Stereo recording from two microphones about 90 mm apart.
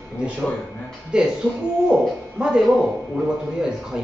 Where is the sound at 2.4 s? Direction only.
5° right (ahead or behind).